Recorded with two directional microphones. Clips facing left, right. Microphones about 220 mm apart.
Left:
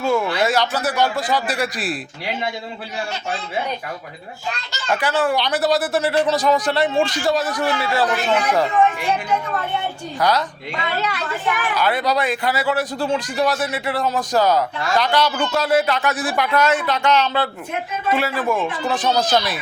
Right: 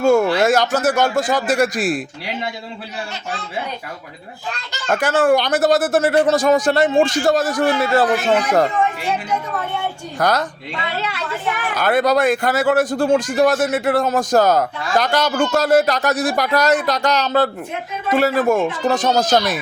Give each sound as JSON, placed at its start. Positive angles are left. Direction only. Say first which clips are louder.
{"t": 0.0, "sound": "speech", "louder": "right 5 dB", "side_deg": -45}
{"t": 4.9, "sound": "speech", "louder": "right 5 dB", "side_deg": -45}
{"t": 10.2, "sound": "speech", "louder": "right 1 dB", "side_deg": -50}
{"t": 11.8, "sound": "speech", "louder": "right 6 dB", "side_deg": -50}